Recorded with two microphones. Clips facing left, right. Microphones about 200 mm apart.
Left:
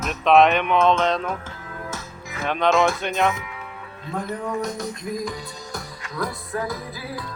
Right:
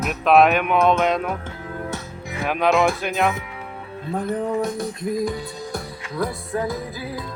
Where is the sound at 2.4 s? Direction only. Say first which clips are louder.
Right 1 dB; 5° right (ahead or behind).